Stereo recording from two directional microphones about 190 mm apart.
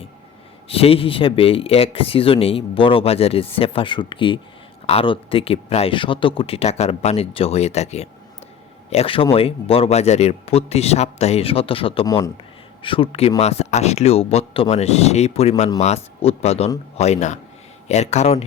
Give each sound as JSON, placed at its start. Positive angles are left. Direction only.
{"t": 0.7, "sound": "speech", "side_deg": 30}
{"t": 12.0, "sound": "speech", "side_deg": 15}
{"t": 12.8, "sound": "speech", "side_deg": 30}